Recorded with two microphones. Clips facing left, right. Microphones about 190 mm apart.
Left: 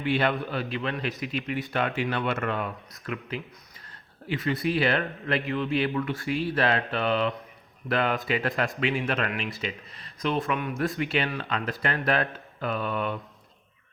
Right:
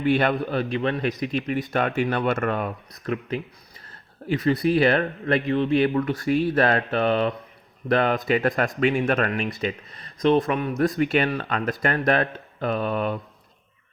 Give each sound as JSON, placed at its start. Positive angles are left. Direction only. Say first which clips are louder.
{"t": 0.0, "sound": "a man's voice", "louder": "right 5 dB", "side_deg": -50}
{"t": 5.8, "sound": "a man's voice", "louder": "right 6 dB", "side_deg": -45}
{"t": 6.3, "sound": "speech", "louder": "right 5 dB", "side_deg": -50}
{"t": 10.2, "sound": "a man's voice", "louder": "right 7 dB", "side_deg": -35}
{"t": 11.0, "sound": "speech", "louder": "right 6 dB", "side_deg": -50}